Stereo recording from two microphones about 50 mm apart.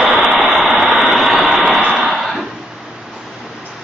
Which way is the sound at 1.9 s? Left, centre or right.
Centre.